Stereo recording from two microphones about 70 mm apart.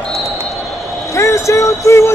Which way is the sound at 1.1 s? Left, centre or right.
Left.